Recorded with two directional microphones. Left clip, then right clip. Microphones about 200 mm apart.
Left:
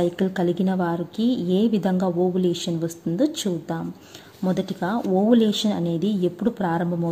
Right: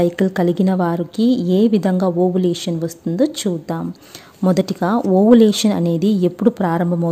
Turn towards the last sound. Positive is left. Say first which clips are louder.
# right 6 dB
turn(degrees=-30)  # may be behind; listen again after turning